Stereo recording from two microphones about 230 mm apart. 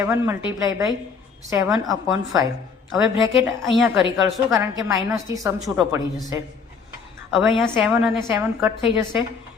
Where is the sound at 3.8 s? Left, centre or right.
Centre.